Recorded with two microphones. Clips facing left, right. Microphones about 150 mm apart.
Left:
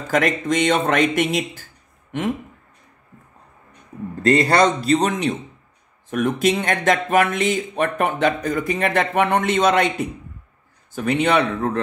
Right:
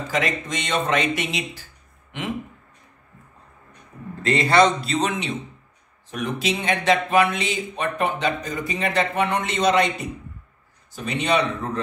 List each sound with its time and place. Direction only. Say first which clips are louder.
0.1 s speech: left 7 dB; 50° left (ahead or behind)
4.2 s speech: left 2 dB; 45° left (ahead or behind)
10.9 s a man's voice: left 4 dB; 55° left (ahead or behind)